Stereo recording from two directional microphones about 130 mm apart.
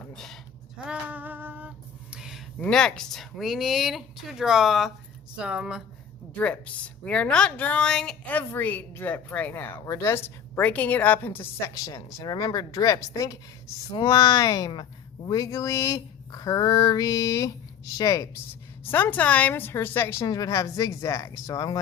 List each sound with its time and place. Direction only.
0.0 s a sound: 5° left (ahead or behind)
0.9 s female singing: 10° right (ahead or behind)
2.6 s speech: 5° left (ahead or behind)
6.3 s speech: 10° left (ahead or behind)
11.7 s speech: 30° left (ahead or behind)
18.9 s speech: 15° left (ahead or behind)